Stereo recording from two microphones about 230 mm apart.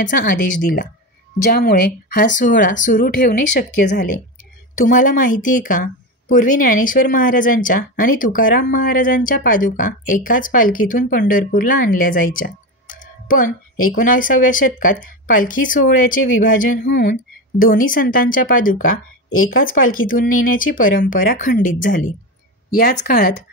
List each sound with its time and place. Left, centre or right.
0.3 s speech: left